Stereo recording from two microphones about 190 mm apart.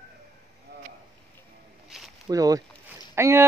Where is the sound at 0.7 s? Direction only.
60° right (ahead or behind).